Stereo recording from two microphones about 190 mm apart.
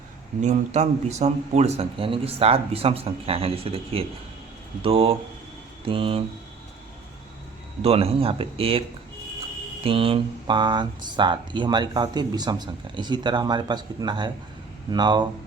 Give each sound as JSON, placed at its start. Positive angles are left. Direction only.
{"t": 0.4, "sound": "speech", "side_deg": -35}
{"t": 7.8, "sound": "speech", "side_deg": -30}
{"t": 9.8, "sound": "speech", "side_deg": -30}